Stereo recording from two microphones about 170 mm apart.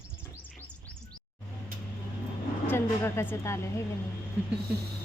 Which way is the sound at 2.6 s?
15° left (ahead or behind).